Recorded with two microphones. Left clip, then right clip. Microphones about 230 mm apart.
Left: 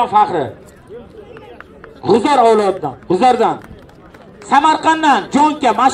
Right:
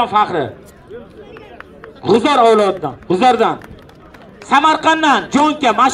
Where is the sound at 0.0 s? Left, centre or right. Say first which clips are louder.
Left 2 dB; right.